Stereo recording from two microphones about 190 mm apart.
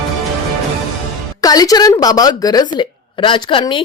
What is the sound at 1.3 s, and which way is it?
Speech, 20° left (ahead or behind).